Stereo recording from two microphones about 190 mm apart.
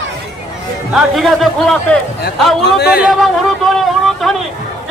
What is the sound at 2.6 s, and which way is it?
Speech, 60° left (ahead or behind).